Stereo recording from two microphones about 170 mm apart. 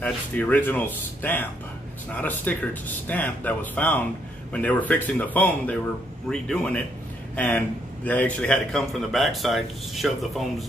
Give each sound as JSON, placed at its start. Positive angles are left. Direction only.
{"t": 0.0, "sound": "a man's voice", "side_deg": 10}